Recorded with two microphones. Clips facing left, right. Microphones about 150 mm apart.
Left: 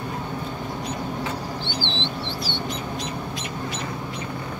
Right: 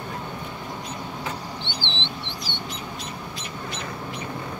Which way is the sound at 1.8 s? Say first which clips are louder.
Left 5 dB; 20° right (ahead or behind).